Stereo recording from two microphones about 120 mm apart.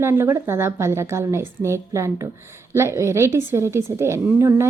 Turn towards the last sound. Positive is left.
turn(degrees=-25)  # may be behind; listen again after turning